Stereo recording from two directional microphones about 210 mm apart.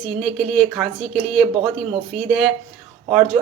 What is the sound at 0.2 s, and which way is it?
Speech, centre (ahead or behind).